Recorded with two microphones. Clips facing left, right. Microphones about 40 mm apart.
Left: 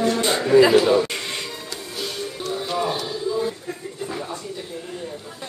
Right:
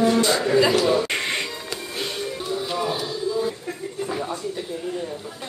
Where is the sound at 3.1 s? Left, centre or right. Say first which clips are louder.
Even; centre.